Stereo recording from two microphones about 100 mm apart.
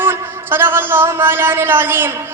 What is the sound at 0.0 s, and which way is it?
Speech, 25° right (ahead or behind).